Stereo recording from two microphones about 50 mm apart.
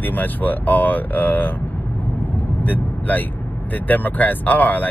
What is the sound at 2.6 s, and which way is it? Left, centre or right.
Vehicle, left.